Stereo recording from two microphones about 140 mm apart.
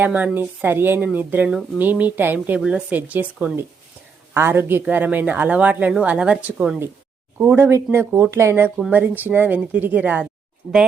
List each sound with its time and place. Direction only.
0.0 s a woman's voice: 15° right (ahead or behind)
7.3 s a woman's voice: 15° right (ahead or behind)